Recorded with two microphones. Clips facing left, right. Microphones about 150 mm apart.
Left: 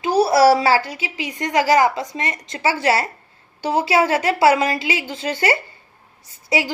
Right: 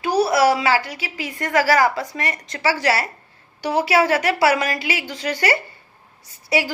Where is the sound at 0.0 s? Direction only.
25° left (ahead or behind).